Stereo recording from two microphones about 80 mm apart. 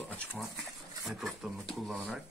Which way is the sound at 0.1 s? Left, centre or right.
Centre.